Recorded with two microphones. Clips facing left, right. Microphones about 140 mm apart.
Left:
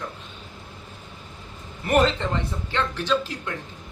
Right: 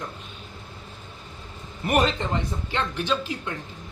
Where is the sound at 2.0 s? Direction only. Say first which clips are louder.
Left 2 dB; 15° right (ahead or behind).